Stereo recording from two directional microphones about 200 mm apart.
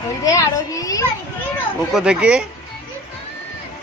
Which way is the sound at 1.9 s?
5° right (ahead or behind).